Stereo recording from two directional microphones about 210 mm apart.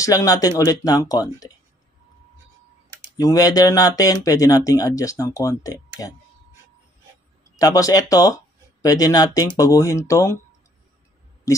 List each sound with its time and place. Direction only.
0.0 s speech: 15° left (ahead or behind)
3.1 s speech: 15° left (ahead or behind)
7.5 s speech: 15° left (ahead or behind)